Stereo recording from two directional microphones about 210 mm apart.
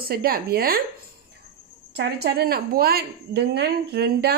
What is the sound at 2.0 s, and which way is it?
A woman's voice, 50° right (ahead or behind).